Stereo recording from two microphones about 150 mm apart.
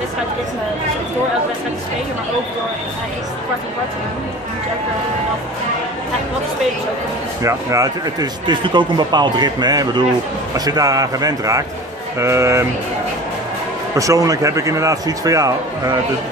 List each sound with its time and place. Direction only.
7.4 s speech: 20° right (ahead or behind)
13.9 s speech: 20° right (ahead or behind)